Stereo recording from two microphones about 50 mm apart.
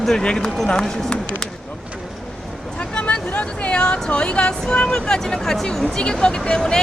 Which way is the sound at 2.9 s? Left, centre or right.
Left.